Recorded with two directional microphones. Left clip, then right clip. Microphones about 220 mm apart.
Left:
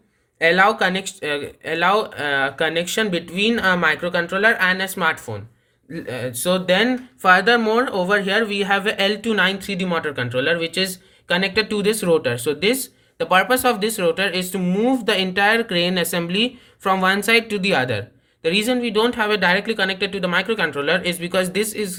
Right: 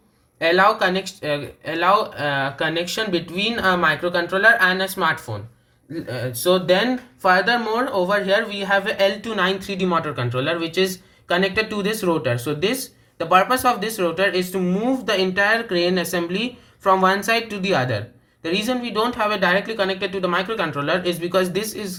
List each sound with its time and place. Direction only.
0.3 s speech: 45° left (ahead or behind)